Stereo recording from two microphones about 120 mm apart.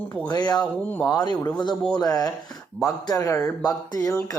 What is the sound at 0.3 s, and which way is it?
Speech, 35° left (ahead or behind).